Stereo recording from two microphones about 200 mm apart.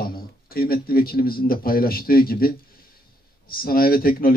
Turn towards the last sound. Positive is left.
turn(degrees=50)  # may be behind; listen again after turning